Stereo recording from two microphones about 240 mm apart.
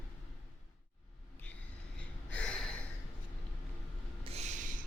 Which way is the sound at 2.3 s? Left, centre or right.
Centre.